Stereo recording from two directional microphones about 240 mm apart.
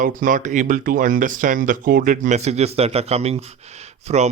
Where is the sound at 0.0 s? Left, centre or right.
Right.